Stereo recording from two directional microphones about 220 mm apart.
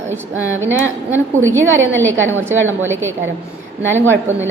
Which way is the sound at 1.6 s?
60° right (ahead or behind).